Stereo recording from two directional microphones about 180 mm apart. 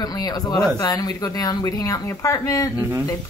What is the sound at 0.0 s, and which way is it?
Speech, 20° left (ahead or behind).